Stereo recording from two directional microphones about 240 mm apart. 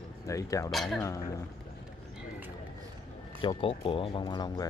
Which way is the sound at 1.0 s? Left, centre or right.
Centre.